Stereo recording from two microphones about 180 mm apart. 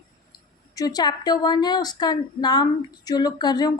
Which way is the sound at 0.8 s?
20° left (ahead or behind).